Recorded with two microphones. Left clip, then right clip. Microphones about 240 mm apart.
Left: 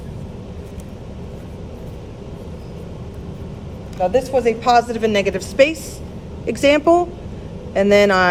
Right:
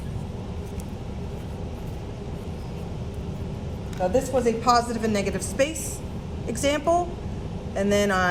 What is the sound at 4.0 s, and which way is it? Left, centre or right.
Speech, centre.